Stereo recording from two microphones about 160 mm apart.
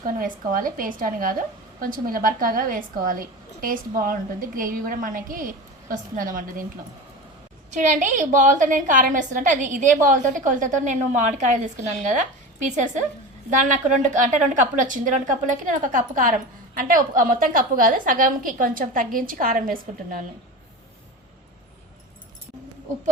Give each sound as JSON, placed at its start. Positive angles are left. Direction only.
{"t": 0.0, "sound": "a woman's voice", "side_deg": -60}
{"t": 7.7, "sound": "a woman's voice", "side_deg": -50}